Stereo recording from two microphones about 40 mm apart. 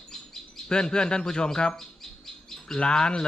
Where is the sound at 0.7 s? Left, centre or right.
Centre.